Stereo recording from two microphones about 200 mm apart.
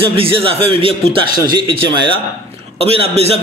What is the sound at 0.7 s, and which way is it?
A man's voice, 25° right (ahead or behind).